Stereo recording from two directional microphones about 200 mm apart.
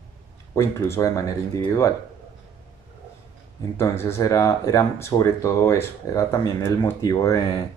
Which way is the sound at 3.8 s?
15° left (ahead or behind).